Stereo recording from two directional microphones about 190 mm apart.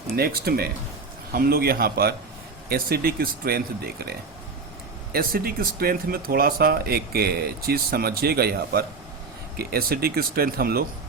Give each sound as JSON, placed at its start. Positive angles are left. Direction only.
{"t": 0.2, "sound": "speech", "side_deg": -55}
{"t": 5.1, "sound": "speech", "side_deg": -50}